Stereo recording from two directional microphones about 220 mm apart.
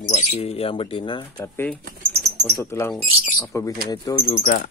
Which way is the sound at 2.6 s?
10° left (ahead or behind).